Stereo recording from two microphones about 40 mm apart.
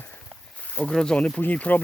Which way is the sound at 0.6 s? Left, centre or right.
Left.